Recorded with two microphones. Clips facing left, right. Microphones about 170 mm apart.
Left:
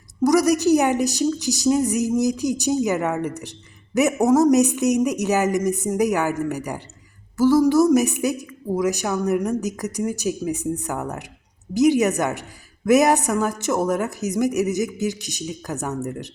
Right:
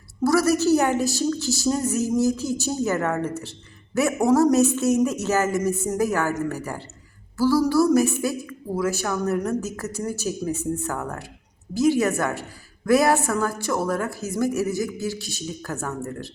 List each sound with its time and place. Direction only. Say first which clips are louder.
0.3 s a woman's voice: left 2 dB; 15° left (ahead or behind)